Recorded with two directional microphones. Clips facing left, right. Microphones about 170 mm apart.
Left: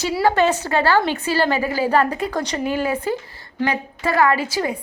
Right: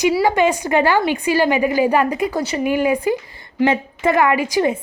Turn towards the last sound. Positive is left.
turn(degrees=-20)  # may be behind; listen again after turning